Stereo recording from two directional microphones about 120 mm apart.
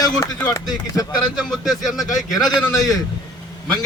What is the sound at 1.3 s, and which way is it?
Speech, 5° right (ahead or behind).